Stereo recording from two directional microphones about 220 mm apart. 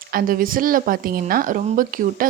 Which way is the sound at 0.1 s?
40° right (ahead or behind).